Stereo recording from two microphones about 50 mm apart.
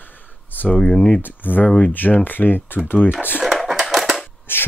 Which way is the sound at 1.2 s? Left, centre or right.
Left.